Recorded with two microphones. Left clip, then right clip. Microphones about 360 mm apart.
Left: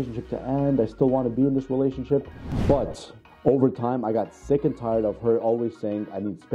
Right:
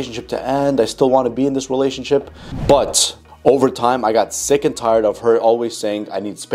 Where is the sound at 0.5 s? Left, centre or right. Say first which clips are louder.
Right 8 dB; centre.